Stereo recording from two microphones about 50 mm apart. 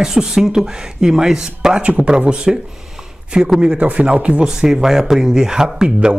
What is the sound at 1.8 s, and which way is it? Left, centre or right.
Speech, right.